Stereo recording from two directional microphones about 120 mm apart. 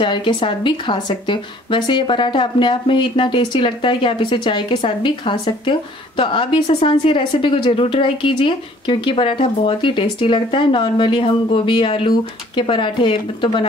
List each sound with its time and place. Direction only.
0.0 s speech: 40° left (ahead or behind)